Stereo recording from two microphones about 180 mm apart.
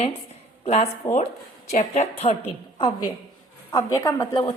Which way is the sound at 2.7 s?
25° left (ahead or behind).